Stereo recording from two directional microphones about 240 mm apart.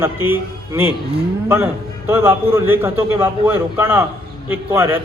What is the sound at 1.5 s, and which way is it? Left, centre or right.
A man's voice, centre.